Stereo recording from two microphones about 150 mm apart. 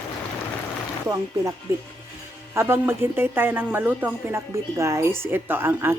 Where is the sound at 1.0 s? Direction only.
20° right (ahead or behind).